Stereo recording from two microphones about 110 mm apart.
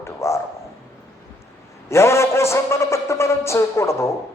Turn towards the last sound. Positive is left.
turn(degrees=25)  # may be behind; listen again after turning